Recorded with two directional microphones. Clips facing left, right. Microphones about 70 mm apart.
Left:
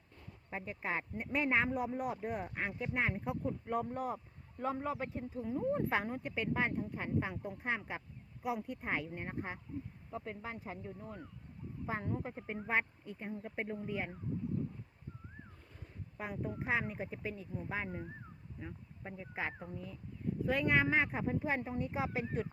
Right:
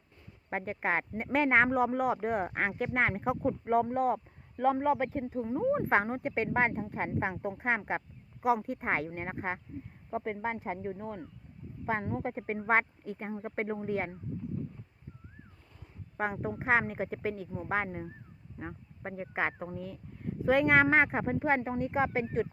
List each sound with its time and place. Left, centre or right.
0.5 s speech: right
5.4 s speech: right
5.7 s speech: right
10.1 s speech: right
12.2 s speech: right
12.6 s speech: right
16.1 s speech: right
16.6 s speech: right
18.6 s speech: right
19.7 s speech: right
20.9 s speech: right